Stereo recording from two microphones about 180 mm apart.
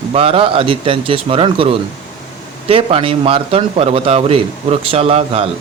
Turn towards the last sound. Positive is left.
turn(degrees=-35)  # may be behind; listen again after turning